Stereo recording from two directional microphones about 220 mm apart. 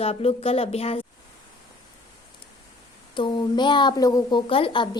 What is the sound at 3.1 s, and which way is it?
A woman's voice, 20° left (ahead or behind).